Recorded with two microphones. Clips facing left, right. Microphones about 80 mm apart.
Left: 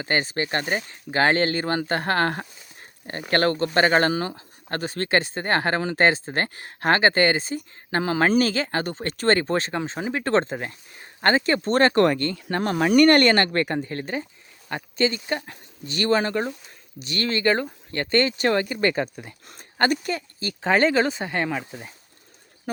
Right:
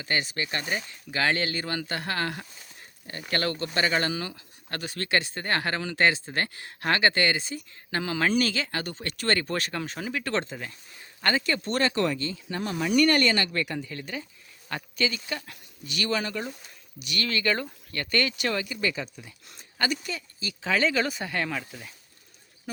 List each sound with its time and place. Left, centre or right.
0.0 s speech: left
21.0 s speech: left